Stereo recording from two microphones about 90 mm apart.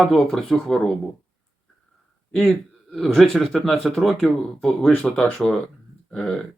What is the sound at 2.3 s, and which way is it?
Speech, 10° left (ahead or behind).